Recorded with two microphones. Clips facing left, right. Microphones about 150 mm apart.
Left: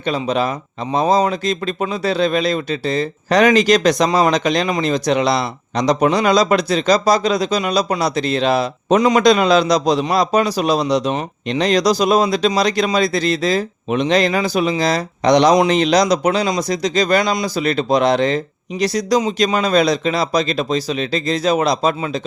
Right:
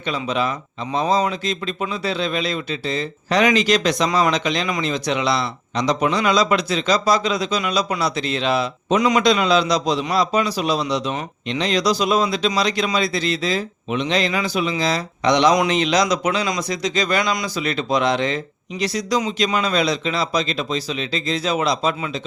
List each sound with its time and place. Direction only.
0.0 s speech: 40° left (ahead or behind)